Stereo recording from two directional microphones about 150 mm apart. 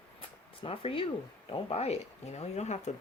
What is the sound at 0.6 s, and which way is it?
Speech, 35° left (ahead or behind).